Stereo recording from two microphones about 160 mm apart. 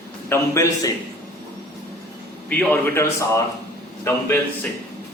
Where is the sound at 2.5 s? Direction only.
15° left (ahead or behind).